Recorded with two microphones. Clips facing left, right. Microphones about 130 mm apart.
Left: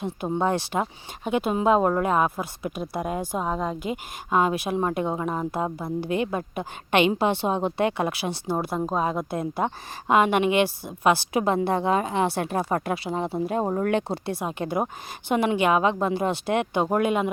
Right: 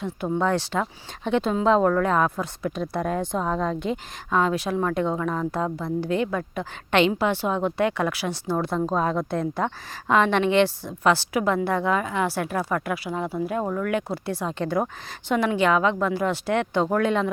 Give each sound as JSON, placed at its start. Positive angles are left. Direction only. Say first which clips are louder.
{"t": 0.0, "sound": "a woman's voice", "louder": "right 1 dB", "side_deg": 20}
{"t": 14.3, "sound": "a woman's voice", "louder": "right 3 dB", "side_deg": 15}